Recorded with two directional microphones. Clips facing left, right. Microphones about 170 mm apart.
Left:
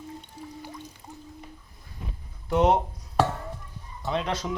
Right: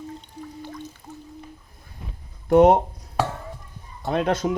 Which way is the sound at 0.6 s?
10° left (ahead or behind).